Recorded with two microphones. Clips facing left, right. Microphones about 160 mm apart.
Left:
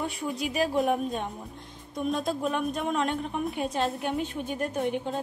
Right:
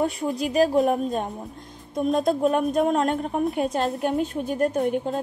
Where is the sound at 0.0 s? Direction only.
40° right (ahead or behind).